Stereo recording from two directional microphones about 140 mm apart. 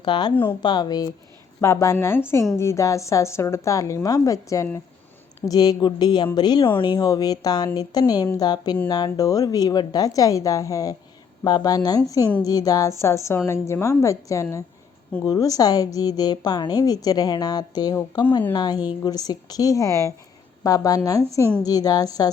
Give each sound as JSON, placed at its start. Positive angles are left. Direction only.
{"t": 0.0, "sound": "a woman's voice", "side_deg": 30}
{"t": 1.6, "sound": "a woman's voice", "side_deg": 20}